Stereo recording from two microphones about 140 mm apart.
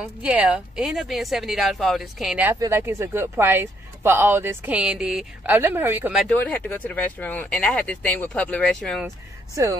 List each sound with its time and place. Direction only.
0.0 s speech: 10° right (ahead or behind)
2.6 s speech: 15° right (ahead or behind)
6.2 s speech: 10° left (ahead or behind)